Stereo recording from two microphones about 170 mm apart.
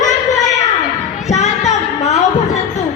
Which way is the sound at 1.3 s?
40° left (ahead or behind).